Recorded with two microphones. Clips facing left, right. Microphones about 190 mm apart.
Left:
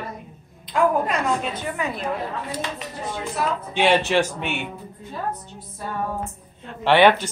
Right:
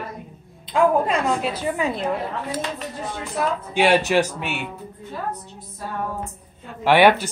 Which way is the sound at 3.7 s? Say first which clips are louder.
Right 1 dB; 10° right (ahead or behind).